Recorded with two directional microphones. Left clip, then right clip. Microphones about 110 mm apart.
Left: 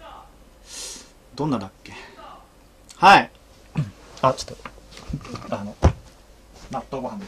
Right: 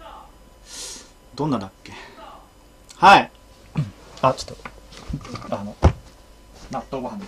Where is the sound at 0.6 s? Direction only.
5° right (ahead or behind).